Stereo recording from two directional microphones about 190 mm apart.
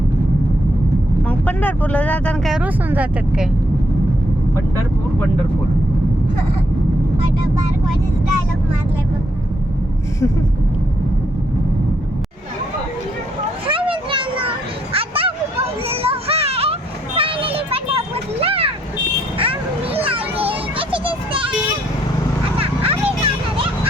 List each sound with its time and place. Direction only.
1.3 s speech: 10° left (ahead or behind)
13.7 s children playing: 25° right (ahead or behind)
22.5 s a sound: 30° right (ahead or behind)